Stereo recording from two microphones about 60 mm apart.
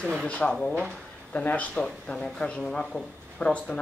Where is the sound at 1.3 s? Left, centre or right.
Left.